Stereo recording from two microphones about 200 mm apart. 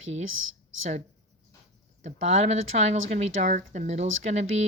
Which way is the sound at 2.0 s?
35° right (ahead or behind).